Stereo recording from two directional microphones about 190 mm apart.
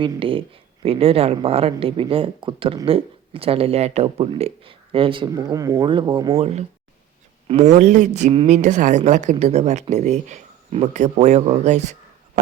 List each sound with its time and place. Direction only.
0.0 s speech: 30° right (ahead or behind)
6.4 s a woman's voice: 35° right (ahead or behind)